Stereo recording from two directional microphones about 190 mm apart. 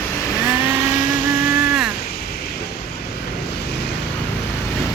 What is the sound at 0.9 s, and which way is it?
Motorboat, 40° left (ahead or behind).